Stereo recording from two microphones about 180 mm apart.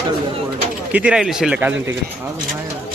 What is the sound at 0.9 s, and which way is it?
A man's voice, 5° right (ahead or behind).